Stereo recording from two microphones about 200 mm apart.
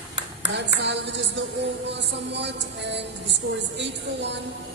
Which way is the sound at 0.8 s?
60° right (ahead or behind).